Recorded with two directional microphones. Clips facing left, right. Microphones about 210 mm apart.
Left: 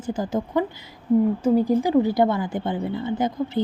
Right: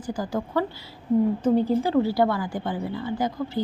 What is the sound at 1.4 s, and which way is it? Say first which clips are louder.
A woman's voice: left 2 dB; 10° left (ahead or behind).